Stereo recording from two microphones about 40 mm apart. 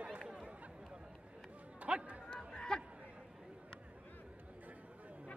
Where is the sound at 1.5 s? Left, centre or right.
Right.